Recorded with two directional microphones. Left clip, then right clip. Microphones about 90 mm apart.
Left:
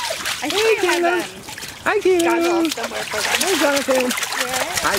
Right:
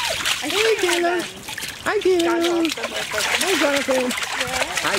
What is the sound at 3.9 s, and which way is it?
Trickle, 20° left (ahead or behind).